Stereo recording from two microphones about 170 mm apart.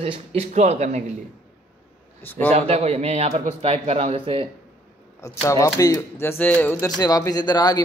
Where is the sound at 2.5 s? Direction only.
40° right (ahead or behind).